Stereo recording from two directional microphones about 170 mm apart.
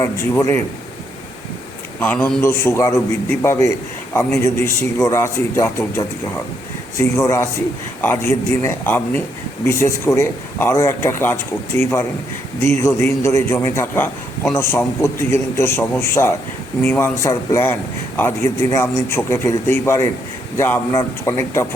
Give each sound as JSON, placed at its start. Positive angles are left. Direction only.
{"t": 0.0, "sound": "a man's voice", "side_deg": 15}
{"t": 2.0, "sound": "a man's voice", "side_deg": 10}